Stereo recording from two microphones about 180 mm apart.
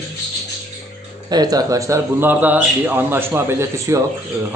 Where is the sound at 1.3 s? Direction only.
20° right (ahead or behind).